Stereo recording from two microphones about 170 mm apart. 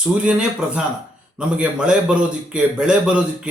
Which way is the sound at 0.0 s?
5° right (ahead or behind).